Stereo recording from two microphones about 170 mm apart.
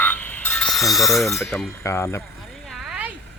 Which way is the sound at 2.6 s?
Centre (ahead or behind).